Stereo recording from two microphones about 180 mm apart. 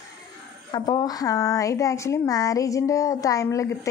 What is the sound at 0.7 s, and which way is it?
A woman's voice, 25° left (ahead or behind).